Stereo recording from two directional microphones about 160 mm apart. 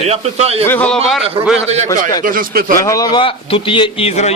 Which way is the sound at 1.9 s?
25° left (ahead or behind).